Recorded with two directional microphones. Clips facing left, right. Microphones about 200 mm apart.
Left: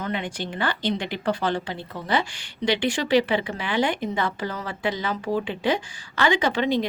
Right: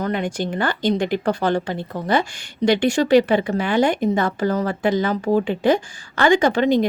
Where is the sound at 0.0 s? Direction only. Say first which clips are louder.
Right 6 dB; 45° right (ahead or behind).